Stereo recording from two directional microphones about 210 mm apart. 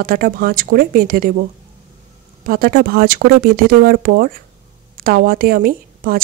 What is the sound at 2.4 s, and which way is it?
Speech, 45° right (ahead or behind).